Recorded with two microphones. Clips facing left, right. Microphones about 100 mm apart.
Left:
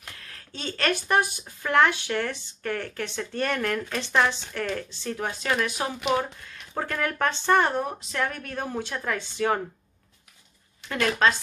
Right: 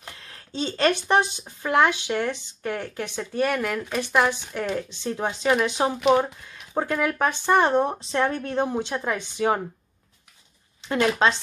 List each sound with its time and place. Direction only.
0.0 s speech: 20° right (ahead or behind)
5.9 s speech: centre (ahead or behind)
6.7 s speech: 15° right (ahead or behind)
10.9 s speech: 20° right (ahead or behind)